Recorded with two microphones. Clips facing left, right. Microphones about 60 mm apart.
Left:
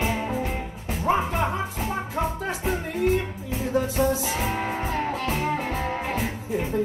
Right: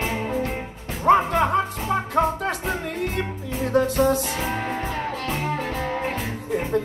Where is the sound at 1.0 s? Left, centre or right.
Right.